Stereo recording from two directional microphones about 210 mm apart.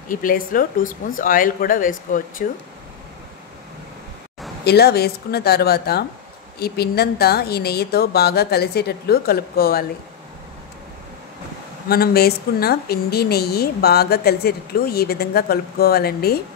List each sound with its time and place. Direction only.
0.1 s speech: 40° left (ahead or behind)
4.6 s a woman's voice: 50° left (ahead or behind)
11.9 s a woman's voice: 45° left (ahead or behind)